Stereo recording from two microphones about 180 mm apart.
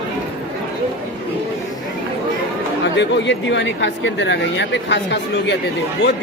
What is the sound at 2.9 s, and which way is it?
Speech, 75° left (ahead or behind).